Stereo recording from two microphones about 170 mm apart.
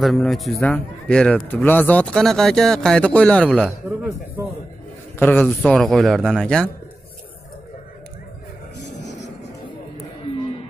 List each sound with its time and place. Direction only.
0.0 s a man's voice: centre (ahead or behind)
5.2 s speech: 10° left (ahead or behind)
5.6 s a man's voice: centre (ahead or behind)
8.7 s a sound: 90° left